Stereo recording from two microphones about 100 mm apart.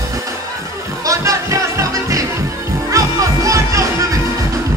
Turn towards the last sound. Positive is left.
turn(degrees=-35)  # may be behind; listen again after turning